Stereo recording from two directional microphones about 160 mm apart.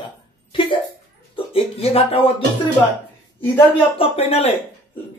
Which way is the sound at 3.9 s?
35° left (ahead or behind).